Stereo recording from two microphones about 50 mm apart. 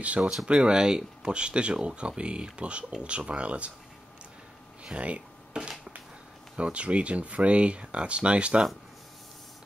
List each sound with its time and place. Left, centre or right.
0.2 s speech: centre
0.5 s speech: centre
4.9 s speech: right